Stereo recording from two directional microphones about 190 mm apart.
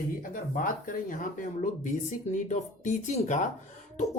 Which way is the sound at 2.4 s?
40° left (ahead or behind).